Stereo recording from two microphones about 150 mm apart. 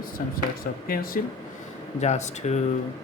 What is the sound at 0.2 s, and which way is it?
Speech, 65° left (ahead or behind).